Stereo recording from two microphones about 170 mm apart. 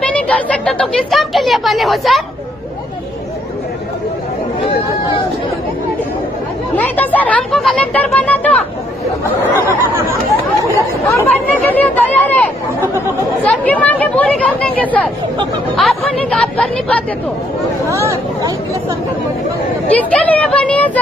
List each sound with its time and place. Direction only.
0.1 s a woman's voice: 10° left (ahead or behind)
6.8 s speech: 10° left (ahead or behind)
9.6 s speech: 15° right (ahead or behind)
11.1 s a woman's voice: 15° left (ahead or behind)
17.8 s speech: 15° right (ahead or behind)
20.0 s speech: 10° left (ahead or behind)